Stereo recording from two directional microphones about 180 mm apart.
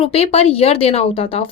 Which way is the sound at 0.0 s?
35° left (ahead or behind).